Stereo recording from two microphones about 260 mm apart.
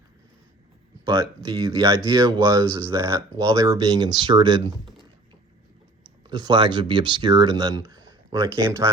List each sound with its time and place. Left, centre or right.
1.0 s speech: centre
6.2 s speech: centre